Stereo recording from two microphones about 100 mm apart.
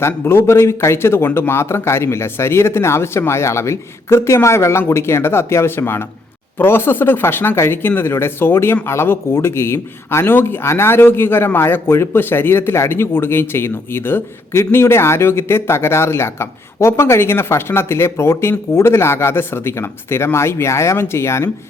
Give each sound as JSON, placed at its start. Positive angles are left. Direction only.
{"t": 0.0, "sound": "speech", "side_deg": 25}